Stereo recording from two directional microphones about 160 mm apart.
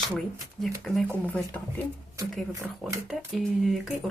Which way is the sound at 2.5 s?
20° right (ahead or behind).